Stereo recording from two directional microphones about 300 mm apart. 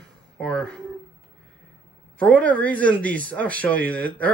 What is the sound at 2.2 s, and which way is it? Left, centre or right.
Speech, centre.